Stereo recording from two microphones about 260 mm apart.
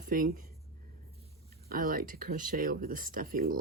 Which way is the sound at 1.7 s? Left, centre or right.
Right.